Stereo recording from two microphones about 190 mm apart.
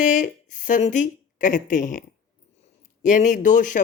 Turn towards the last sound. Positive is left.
turn(degrees=40)  # may be behind; listen again after turning